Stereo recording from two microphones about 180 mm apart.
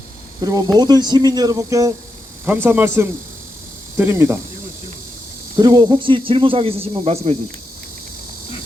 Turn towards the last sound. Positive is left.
turn(degrees=-35)  # may be behind; listen again after turning